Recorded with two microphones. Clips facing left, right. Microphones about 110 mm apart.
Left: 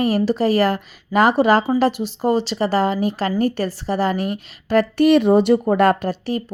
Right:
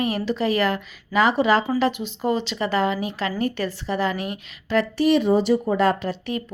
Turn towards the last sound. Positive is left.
turn(degrees=35)  # may be behind; listen again after turning